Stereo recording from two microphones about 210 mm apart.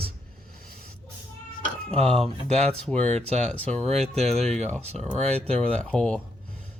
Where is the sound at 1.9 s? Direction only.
5° left (ahead or behind).